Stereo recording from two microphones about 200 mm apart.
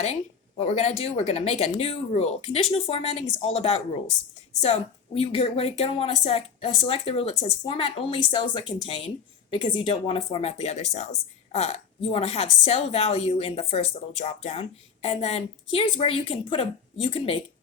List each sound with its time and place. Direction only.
0.0 s a woman's voice: 30° left (ahead or behind)